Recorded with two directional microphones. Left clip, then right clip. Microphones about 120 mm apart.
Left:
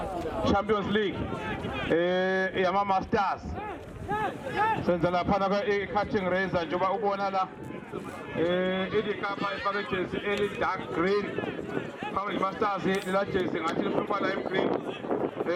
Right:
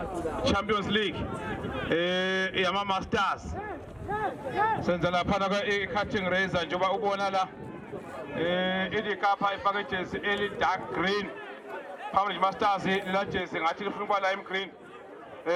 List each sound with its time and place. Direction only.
0.4 s a man's voice: 50° right (ahead or behind)
1.5 s speech: centre (ahead or behind)
1.9 s speech: 55° right (ahead or behind)
4.1 s speech: 15° left (ahead or behind)
4.8 s a man's voice: 50° right (ahead or behind)
8.4 s a man's voice: 40° right (ahead or behind)